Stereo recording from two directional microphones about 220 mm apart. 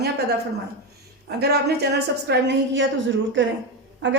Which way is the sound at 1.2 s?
45° right (ahead or behind).